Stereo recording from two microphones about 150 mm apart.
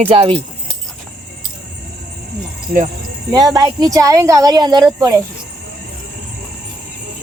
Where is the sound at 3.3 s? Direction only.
25° right (ahead or behind).